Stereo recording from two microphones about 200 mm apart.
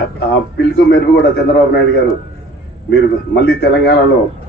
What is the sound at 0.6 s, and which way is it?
A man's voice, 55° left (ahead or behind).